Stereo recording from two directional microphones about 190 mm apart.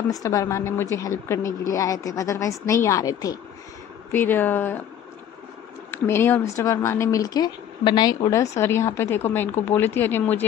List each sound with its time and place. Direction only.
0.1 s speech: 20° left (ahead or behind)
5.9 s speech: 10° left (ahead or behind)